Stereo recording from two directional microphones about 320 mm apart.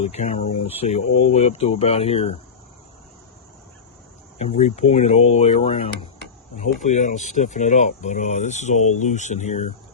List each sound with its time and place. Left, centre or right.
0.0 s speech: centre
4.4 s speech: left